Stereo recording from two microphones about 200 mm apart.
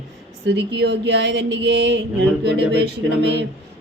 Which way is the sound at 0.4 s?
55° right (ahead or behind).